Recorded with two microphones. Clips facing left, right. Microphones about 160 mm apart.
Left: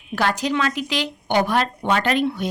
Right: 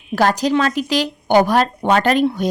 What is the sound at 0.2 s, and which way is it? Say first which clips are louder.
A woman's voice: right 5 dB; 40° right (ahead or behind).